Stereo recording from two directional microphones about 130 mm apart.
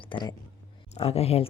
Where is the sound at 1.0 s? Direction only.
50° left (ahead or behind).